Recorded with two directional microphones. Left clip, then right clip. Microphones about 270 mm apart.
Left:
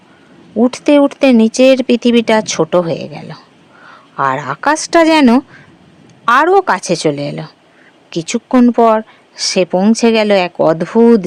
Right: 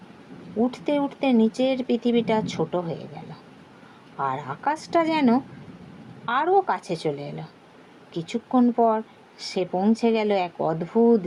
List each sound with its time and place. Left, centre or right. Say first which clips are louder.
0.6 s speech: left 14 dB; left